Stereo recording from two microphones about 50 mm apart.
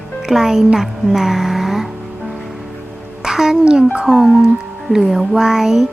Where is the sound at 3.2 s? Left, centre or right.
Centre.